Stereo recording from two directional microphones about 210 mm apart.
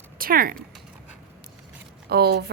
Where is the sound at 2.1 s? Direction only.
50° right (ahead or behind).